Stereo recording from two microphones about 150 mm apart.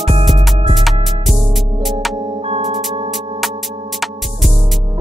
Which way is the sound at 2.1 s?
35° right (ahead or behind).